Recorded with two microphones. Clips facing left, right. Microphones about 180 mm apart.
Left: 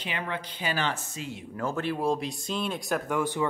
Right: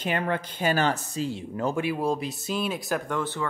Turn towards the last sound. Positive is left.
turn(degrees=10)  # may be behind; listen again after turning